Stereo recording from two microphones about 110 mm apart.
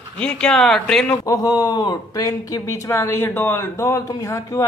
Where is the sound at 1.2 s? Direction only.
35° left (ahead or behind).